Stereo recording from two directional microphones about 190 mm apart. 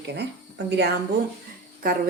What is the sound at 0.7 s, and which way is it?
Speech, 65° right (ahead or behind).